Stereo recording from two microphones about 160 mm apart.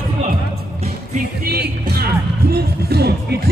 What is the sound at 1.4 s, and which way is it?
Speech, 85° right.